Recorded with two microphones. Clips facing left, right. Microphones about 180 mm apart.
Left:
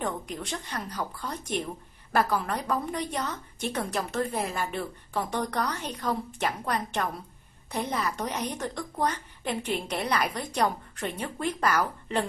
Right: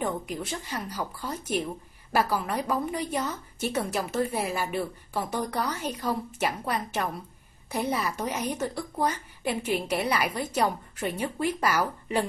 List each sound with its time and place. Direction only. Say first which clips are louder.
0.0 s a woman's voice: right 2 dB; 5° right (ahead or behind)